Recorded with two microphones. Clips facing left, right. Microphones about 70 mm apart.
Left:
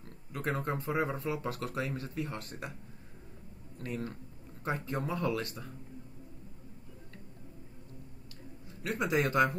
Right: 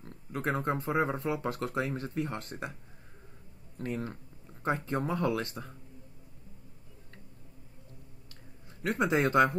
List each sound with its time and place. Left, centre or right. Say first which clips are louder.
0.0 s speech: right 3 dB; right
3.7 s speech: right 3 dB; right
8.8 s speech: right 3 dB; right